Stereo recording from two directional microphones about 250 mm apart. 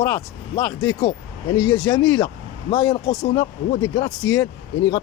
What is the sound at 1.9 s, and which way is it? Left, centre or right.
Speech, centre.